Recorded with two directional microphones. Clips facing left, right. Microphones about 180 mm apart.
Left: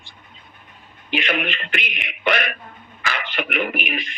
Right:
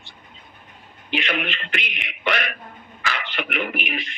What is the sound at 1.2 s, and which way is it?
A man's voice, 50° left (ahead or behind).